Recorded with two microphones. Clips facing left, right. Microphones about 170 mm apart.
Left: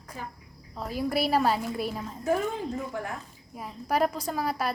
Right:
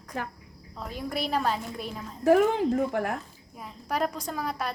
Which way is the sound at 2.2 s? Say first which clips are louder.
Right 7 dB; 80° right.